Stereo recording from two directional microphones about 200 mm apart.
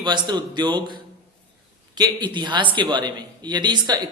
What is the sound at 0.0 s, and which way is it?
Speech, 20° right (ahead or behind).